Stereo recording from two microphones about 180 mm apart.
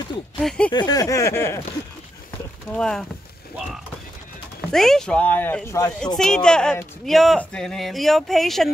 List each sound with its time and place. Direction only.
0.4 s speech: 5° left (ahead or behind)
0.7 s speech: 20° left (ahead or behind)
2.7 s speech: 5° left (ahead or behind)
4.7 s speech: centre (ahead or behind)
5.9 s speech: 5° left (ahead or behind)